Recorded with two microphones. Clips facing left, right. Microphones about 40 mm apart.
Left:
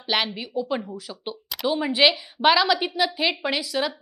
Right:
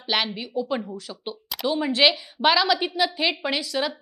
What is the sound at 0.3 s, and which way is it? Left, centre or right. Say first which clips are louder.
Speech: even; centre.